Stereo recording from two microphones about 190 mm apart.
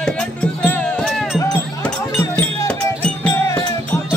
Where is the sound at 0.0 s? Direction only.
5° left (ahead or behind).